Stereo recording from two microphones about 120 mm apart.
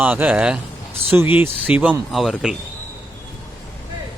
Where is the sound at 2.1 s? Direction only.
Centre (ahead or behind).